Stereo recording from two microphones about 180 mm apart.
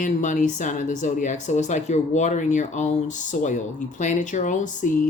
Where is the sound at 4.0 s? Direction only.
45° left (ahead or behind).